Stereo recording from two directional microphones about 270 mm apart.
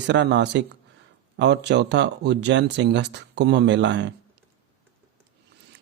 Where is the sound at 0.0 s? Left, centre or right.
Right.